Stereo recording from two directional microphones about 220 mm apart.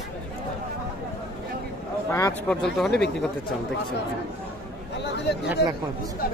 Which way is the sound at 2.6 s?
Centre (ahead or behind).